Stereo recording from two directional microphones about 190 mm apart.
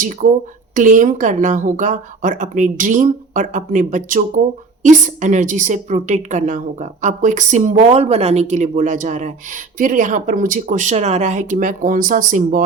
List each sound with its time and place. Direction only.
0.0 s a woman's voice: 45° right (ahead or behind)